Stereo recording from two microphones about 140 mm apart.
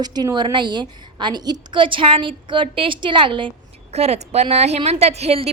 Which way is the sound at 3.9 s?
50° right (ahead or behind).